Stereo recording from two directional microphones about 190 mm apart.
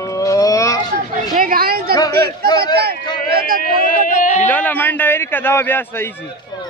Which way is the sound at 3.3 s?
50° right (ahead or behind).